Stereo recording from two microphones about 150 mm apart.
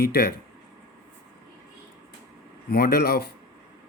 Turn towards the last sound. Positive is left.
turn(degrees=90)